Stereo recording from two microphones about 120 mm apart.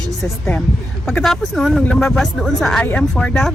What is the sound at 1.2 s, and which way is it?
Speech, centre (ahead or behind).